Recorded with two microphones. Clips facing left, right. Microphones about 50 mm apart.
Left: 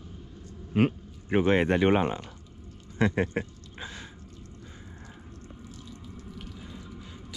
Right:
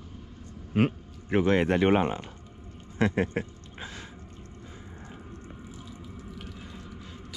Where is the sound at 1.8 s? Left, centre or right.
Right.